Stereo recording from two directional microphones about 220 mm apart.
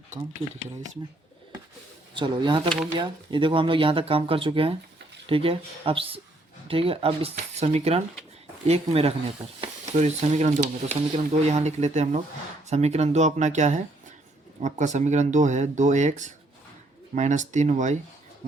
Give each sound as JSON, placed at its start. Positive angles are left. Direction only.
{"t": 0.4, "sound": "speech", "side_deg": 0}
{"t": 2.1, "sound": "speech", "side_deg": -20}